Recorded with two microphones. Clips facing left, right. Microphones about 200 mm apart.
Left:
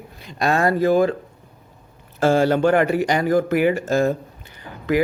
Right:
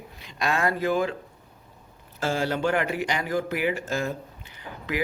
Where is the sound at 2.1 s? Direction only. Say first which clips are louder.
Left 10 dB; 55° left (ahead or behind).